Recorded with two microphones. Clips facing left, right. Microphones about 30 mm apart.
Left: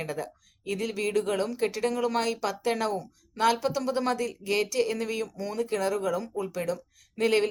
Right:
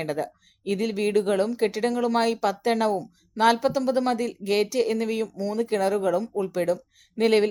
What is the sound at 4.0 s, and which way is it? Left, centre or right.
Speech, right.